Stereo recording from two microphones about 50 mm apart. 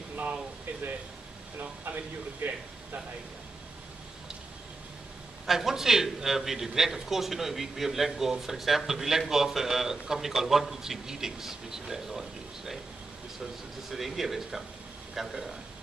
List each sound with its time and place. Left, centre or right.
0.1 s air conditioning: right
1.6 s speech: right
5.5 s a man's voice: centre
13.8 s a man's voice: centre